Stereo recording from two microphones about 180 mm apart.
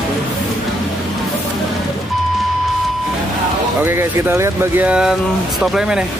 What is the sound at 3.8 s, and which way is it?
Speech, 15° right (ahead or behind).